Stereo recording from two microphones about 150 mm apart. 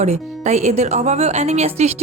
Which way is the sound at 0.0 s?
50° right (ahead or behind).